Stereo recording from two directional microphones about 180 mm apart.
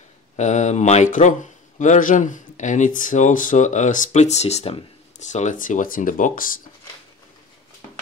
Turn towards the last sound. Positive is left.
turn(degrees=50)  # may be behind; listen again after turning